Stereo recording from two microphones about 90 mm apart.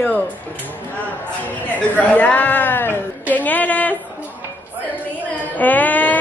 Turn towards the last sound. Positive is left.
turn(degrees=20)  # may be behind; listen again after turning